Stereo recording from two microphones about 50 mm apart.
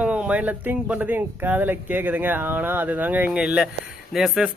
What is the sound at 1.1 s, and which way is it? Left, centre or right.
Speech, right.